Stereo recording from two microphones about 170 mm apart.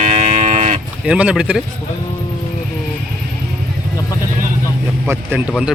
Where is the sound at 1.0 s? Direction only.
5° right (ahead or behind).